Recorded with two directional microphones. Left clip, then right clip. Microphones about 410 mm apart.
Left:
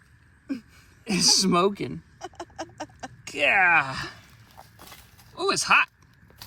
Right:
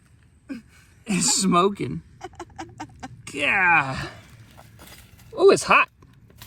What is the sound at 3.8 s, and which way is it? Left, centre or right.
Speech, centre.